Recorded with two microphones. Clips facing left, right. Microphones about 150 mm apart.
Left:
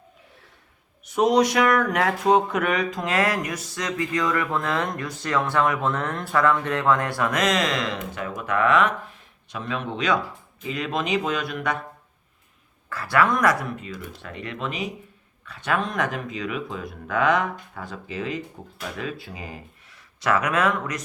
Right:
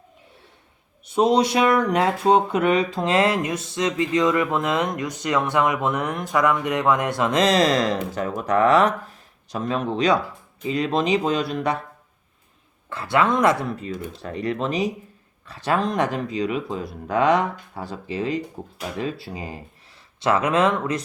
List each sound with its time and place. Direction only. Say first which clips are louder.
1.0 s speech: right 1 dB; 30° right (ahead or behind)
12.9 s speech: right 1 dB; 25° right (ahead or behind)